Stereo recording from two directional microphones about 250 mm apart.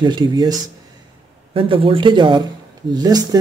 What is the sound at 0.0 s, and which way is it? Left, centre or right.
Speech, centre.